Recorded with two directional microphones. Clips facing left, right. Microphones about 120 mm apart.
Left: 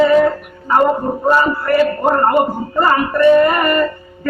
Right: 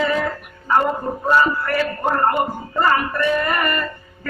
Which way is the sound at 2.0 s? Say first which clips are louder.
Left 5 dB; 30° left (ahead or behind).